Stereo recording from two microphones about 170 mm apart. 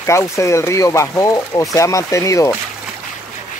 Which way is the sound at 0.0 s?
15° left (ahead or behind).